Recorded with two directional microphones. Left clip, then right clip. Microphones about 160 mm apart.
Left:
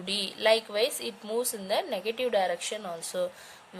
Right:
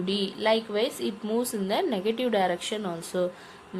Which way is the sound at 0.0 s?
50° left (ahead or behind).